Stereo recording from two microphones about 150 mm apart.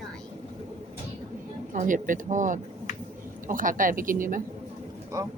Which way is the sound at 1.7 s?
60° right (ahead or behind).